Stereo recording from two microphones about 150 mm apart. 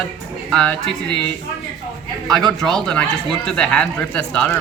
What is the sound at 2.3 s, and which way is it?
A man's voice, 5° left (ahead or behind).